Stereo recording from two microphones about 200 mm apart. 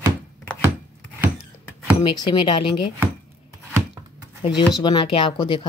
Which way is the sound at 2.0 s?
25° left (ahead or behind).